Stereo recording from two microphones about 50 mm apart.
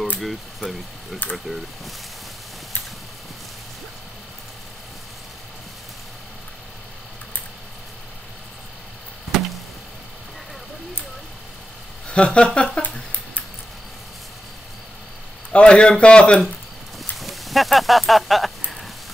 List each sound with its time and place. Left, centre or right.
0.2 s speech: centre
9.3 s chop: centre
12.1 s speech: left
15.5 s speech: left
17.2 s a sound: centre